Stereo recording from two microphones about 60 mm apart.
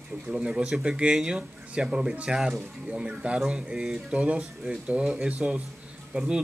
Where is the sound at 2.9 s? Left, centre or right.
Centre.